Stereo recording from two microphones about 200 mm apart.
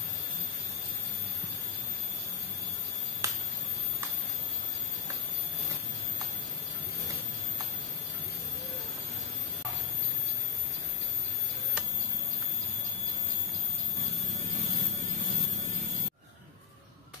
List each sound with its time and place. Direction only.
3.2 s finger snapping: 15° right (ahead or behind)